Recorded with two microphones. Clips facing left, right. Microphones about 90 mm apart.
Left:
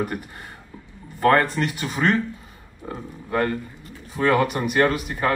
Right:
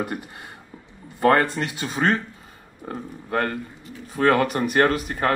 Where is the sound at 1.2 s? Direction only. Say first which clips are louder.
Even; 25° right (ahead or behind).